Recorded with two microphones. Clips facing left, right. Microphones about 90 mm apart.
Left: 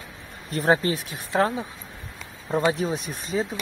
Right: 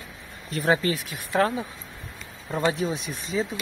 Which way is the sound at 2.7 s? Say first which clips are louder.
Left 1 dB; 40° left (ahead or behind).